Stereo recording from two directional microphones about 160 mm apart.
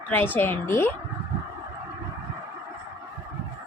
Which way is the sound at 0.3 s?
15° left (ahead or behind).